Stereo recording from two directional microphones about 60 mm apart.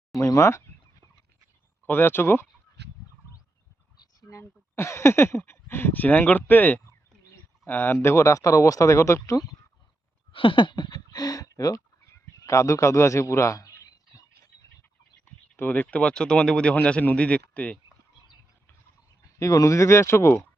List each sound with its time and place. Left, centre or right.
0.2 s speech: left
1.9 s speech: left
4.0 s a sound: left
4.4 s speech: left
8.0 s speech: left
11.1 s speech: left
12.0 s a sound: left
15.5 s a man's voice: left
19.4 s speech: left